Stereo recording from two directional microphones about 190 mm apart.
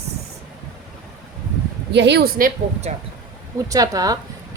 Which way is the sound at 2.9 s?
35° right (ahead or behind).